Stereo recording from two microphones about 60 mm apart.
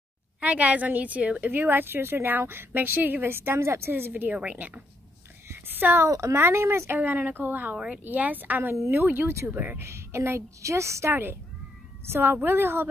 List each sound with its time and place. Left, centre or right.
0.4 s a woman's voice: right
5.5 s a sound: right
6.0 s speech: right
6.3 s a woman's voice: right
7.0 s a woman's voice: right
7.7 s speech: centre
8.0 s a woman's voice: right
9.8 s a woman's voice: right
12.1 s a woman's voice: right